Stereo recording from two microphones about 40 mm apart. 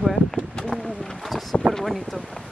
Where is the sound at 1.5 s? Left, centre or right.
Left.